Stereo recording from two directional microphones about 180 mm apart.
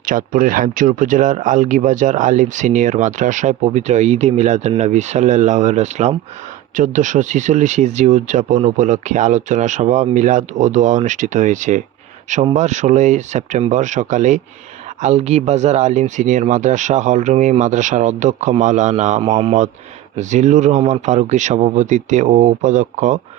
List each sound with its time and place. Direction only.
0.0 s speech: 50° right (ahead or behind)